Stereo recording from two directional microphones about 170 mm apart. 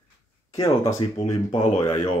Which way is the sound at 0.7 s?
20° left (ahead or behind).